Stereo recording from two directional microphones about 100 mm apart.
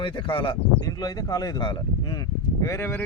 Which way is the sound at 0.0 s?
60° left (ahead or behind).